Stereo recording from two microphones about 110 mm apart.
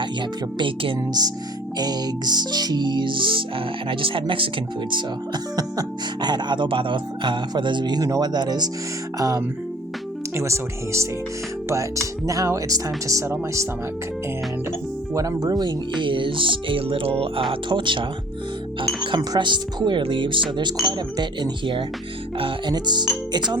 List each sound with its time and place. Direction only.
0.0 s speech: 50° right (ahead or behind)
1.8 s speech: 40° right (ahead or behind)
15.1 s speech: 30° right (ahead or behind); by 22.7 s 55° right (ahead or behind)
22.7 s speech: 40° right (ahead or behind)